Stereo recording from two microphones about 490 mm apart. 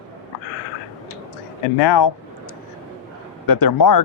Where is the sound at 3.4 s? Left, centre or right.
Left.